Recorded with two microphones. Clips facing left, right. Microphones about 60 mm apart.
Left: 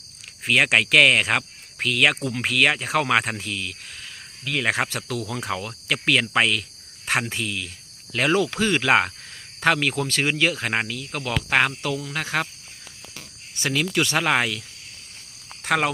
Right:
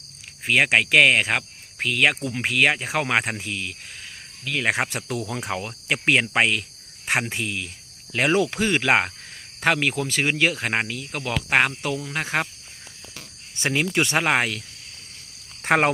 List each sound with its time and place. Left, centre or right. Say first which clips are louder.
0.4 s speech: even; centre
13.6 s speech: right 1 dB; right
15.6 s speech: right 3 dB; right